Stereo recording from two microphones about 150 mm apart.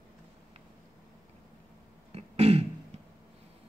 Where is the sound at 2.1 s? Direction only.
45° right (ahead or behind).